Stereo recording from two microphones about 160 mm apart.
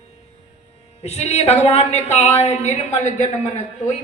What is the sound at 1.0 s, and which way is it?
A man's voice, 45° left (ahead or behind).